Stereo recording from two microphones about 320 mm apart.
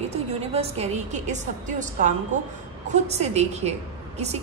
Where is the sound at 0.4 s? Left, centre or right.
Centre.